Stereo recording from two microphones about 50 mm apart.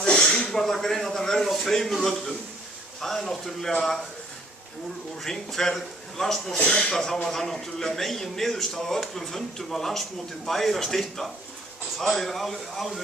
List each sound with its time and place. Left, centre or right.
0.1 s a sound: centre
0.6 s speech: centre
5.2 s speech: centre
6.6 s speech: left
6.9 s speech: centre